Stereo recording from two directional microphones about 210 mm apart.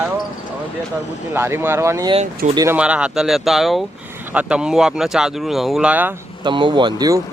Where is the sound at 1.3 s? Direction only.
10° right (ahead or behind).